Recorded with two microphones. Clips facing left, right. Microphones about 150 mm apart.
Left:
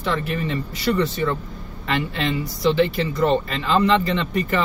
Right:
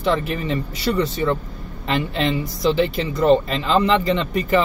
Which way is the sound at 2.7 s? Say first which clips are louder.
Left 1 dB; 20° right (ahead or behind).